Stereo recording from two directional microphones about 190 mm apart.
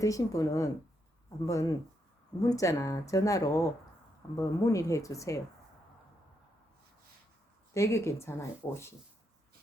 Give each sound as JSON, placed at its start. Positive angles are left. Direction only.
{"t": 0.0, "sound": "speech", "side_deg": 15}
{"t": 7.7, "sound": "speech", "side_deg": 15}